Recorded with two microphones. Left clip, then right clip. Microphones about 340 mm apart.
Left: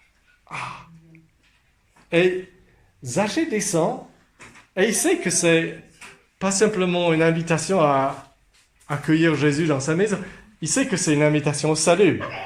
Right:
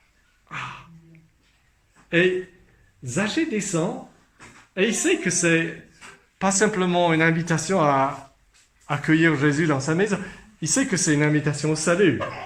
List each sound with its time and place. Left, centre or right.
0.4 s dog: centre
2.0 s speech: centre
6.4 s speech: centre